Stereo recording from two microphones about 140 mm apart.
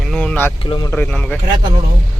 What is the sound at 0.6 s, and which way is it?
Speech, 35° left (ahead or behind).